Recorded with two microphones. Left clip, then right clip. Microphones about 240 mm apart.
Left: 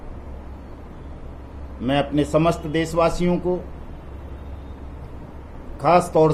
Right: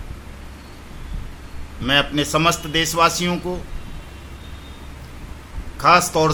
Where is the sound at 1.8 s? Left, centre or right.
Centre.